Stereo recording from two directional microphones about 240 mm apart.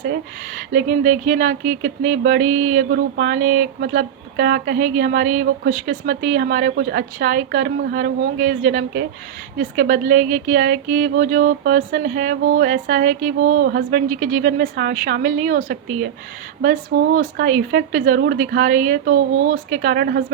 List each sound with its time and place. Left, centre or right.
0.5 s speech: right
17.2 s speech: right